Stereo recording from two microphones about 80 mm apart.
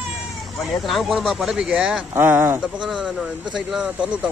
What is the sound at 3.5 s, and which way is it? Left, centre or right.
Speech, centre.